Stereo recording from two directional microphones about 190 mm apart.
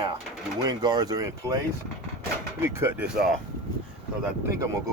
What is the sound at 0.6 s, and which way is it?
Speech, 20° right (ahead or behind).